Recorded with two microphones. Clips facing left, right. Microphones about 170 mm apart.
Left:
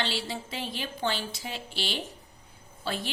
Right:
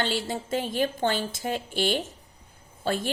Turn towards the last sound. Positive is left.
turn(degrees=-45)  # may be behind; listen again after turning